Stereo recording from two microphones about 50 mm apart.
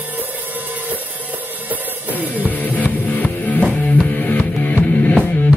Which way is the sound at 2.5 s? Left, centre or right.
Left.